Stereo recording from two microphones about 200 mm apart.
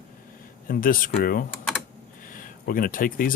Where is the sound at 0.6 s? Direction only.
45° left (ahead or behind).